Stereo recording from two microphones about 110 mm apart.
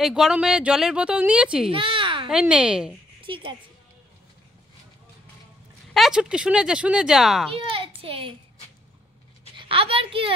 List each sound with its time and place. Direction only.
0.0 s speech: 5° right (ahead or behind)
1.7 s a sound: 50° right (ahead or behind)
2.2 s speech: 10° right (ahead or behind)
3.2 s a woman's voice: 50° right (ahead or behind)
5.9 s speech: 5° right (ahead or behind)
7.7 s a sound: 55° right (ahead or behind)
9.6 s a woman's voice: 55° right (ahead or behind)